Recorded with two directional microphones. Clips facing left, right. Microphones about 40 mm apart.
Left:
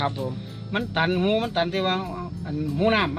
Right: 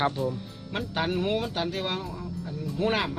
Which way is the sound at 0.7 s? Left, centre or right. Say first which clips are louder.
Left 5 dB; left.